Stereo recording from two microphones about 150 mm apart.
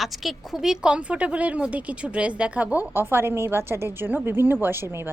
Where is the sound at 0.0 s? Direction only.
Centre (ahead or behind).